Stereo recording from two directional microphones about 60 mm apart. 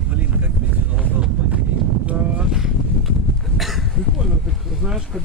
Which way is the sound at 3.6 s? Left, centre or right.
Centre.